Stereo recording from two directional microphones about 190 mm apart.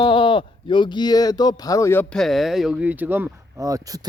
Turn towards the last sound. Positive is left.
turn(degrees=-20)  # may be behind; listen again after turning